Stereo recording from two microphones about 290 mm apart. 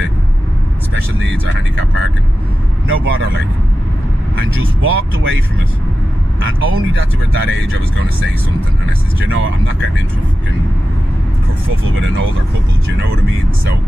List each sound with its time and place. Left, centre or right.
2.9 s speech: right
4.8 s speech: right
6.4 s speech: right
11.6 s speech: right